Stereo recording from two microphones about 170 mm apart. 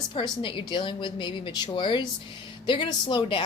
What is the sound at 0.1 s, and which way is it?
A woman's voice, 30° left (ahead or behind).